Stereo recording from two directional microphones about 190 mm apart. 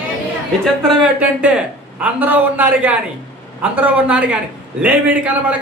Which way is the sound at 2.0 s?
10° right (ahead or behind).